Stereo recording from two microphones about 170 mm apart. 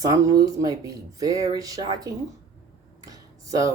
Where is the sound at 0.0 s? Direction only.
20° right (ahead or behind).